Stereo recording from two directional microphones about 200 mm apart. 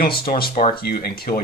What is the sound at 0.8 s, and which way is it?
Speech, 50° left (ahead or behind).